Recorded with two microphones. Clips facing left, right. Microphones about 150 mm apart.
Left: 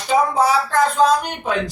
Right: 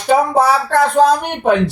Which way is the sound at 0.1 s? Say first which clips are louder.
Right 4 dB; 60° right (ahead or behind).